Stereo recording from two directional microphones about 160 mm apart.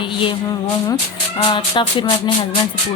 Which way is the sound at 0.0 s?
30° left (ahead or behind).